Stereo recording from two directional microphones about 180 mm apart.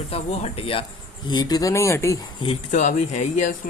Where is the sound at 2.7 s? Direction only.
40° left (ahead or behind).